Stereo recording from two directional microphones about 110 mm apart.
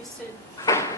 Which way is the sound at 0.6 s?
25° left (ahead or behind).